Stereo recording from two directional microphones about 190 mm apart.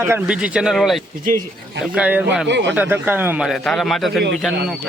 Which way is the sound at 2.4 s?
65° right (ahead or behind).